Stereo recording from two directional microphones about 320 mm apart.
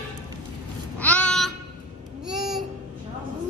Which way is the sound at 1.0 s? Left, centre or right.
Centre.